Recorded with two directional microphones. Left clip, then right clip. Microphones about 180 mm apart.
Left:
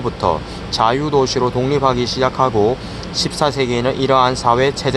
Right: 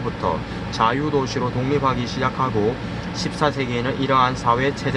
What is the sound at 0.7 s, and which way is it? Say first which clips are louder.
Speech: left 5 dB; 60° left (ahead or behind).